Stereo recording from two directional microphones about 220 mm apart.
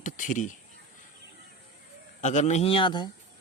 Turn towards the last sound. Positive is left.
turn(degrees=20)  # may be behind; listen again after turning